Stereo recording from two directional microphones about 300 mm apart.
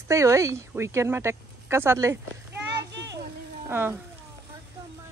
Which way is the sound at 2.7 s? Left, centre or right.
Right.